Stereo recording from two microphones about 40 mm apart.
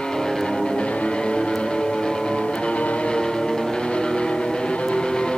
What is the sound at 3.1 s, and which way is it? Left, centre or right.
Music, centre.